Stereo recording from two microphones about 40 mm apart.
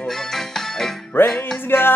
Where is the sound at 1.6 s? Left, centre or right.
Left.